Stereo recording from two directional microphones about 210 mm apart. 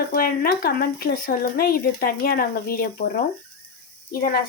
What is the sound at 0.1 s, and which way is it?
Speech, 45° left (ahead or behind).